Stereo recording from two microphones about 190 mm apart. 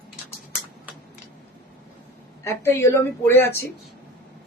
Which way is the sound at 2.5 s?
15° left (ahead or behind).